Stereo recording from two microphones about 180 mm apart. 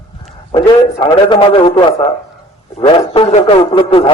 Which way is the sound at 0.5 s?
25° left (ahead or behind).